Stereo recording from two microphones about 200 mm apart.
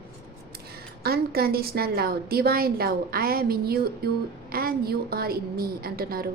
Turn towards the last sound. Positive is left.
turn(degrees=-50)  # may be behind; listen again after turning